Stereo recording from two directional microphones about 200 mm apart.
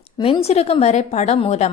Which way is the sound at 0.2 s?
30° left (ahead or behind).